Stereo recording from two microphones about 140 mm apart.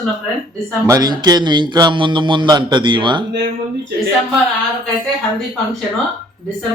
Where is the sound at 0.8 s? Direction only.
25° right (ahead or behind).